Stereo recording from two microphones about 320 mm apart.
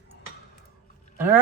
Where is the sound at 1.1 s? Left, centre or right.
Centre.